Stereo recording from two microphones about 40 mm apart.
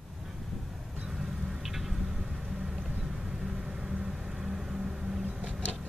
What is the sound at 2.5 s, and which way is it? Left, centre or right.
Vehicle, centre.